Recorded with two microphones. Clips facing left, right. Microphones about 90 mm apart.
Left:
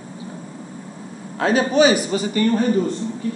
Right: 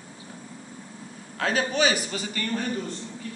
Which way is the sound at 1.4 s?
20° left (ahead or behind).